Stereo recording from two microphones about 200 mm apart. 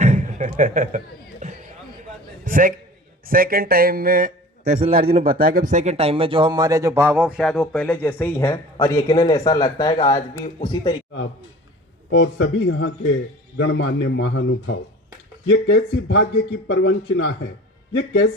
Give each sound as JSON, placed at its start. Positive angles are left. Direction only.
{"t": 0.0, "sound": "beatboxing", "side_deg": -35}
{"t": 2.4, "sound": "a sound", "side_deg": -45}
{"t": 3.2, "sound": "a man's voice", "side_deg": -45}
{"t": 4.9, "sound": "a man's voice", "side_deg": -45}
{"t": 12.1, "sound": "a man's voice", "side_deg": 65}